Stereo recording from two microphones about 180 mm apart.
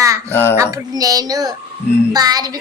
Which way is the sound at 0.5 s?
15° right (ahead or behind).